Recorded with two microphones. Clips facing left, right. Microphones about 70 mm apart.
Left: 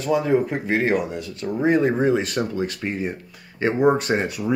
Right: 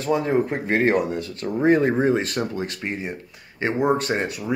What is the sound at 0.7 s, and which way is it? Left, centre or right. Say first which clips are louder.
Speech: right 2 dB; right.